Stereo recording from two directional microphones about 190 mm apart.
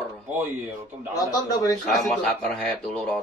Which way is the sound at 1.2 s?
15° left (ahead or behind).